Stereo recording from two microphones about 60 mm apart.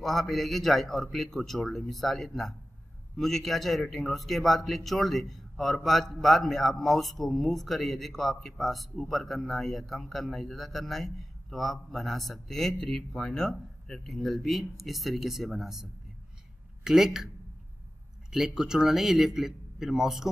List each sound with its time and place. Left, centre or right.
0.0 s a man's voice: centre
18.3 s speech: centre